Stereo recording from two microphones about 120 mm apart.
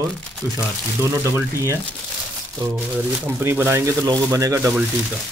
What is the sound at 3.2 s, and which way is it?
Speech, 20° right (ahead or behind).